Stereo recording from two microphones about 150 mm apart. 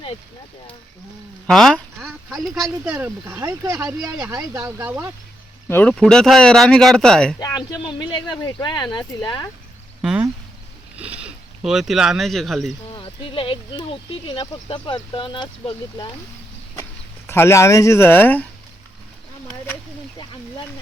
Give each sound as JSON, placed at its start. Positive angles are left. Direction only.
{"t": 1.5, "sound": "speech", "side_deg": 0}
{"t": 2.9, "sound": "speech", "side_deg": -15}
{"t": 5.6, "sound": "speech", "side_deg": 15}
{"t": 7.3, "sound": "speech", "side_deg": 25}
{"t": 10.0, "sound": "speech", "side_deg": -5}
{"t": 12.9, "sound": "speech", "side_deg": 35}
{"t": 17.2, "sound": "speech", "side_deg": 15}